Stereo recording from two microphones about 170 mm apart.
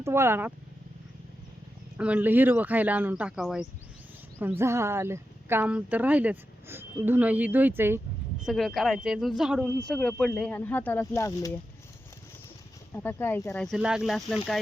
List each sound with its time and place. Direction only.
0.0 s speech: 15° right (ahead or behind)
2.0 s speech: 10° right (ahead or behind)
4.4 s speech: 15° right (ahead or behind)
7.8 s a sound: 15° right (ahead or behind)
8.4 s speech: centre (ahead or behind); by 11.5 s 15° left (ahead or behind)
12.9 s speech: 10° left (ahead or behind)